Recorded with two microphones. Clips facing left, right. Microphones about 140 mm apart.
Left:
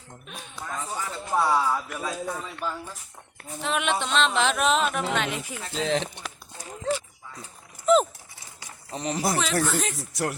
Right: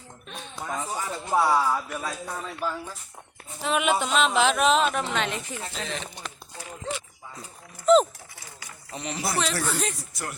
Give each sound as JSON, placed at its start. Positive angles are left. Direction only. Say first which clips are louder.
{"t": 0.5, "sound": "speech", "louder": "right 2 dB", "side_deg": -20}
{"t": 1.4, "sound": "speech", "louder": "right 1 dB", "side_deg": 0}
{"t": 5.7, "sound": "speech", "louder": "left 11 dB", "side_deg": 90}
{"t": 8.9, "sound": "speech", "louder": "left 4 dB", "side_deg": 40}
{"t": 9.3, "sound": "speech", "louder": "even", "side_deg": 0}
{"t": 10.1, "sound": "speech", "louder": "left 7 dB", "side_deg": 80}